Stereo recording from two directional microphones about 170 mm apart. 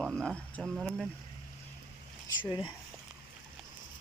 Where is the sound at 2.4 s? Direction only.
25° left (ahead or behind).